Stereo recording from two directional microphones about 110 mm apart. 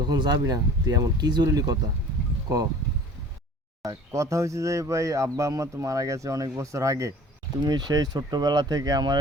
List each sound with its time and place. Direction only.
0.0 s speech: 40° right (ahead or behind)
3.8 s speech: 25° right (ahead or behind)
7.6 s speech: 40° right (ahead or behind)